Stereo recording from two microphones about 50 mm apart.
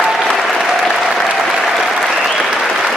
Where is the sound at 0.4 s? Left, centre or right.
Centre.